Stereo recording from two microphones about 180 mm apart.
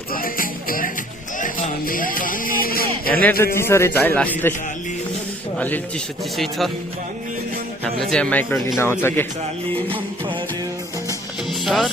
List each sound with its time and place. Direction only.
0.1 s music: 50° left (ahead or behind)
3.1 s a man's voice: 10° left (ahead or behind)
5.5 s a man's voice: 10° left (ahead or behind)
8.1 s a man's voice: 5° left (ahead or behind)
11.6 s music: centre (ahead or behind)